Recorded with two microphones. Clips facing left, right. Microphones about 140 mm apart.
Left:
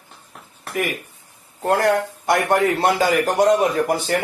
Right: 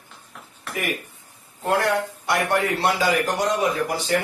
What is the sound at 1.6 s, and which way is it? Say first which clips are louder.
Speech: left 4 dB; 45° left (ahead or behind).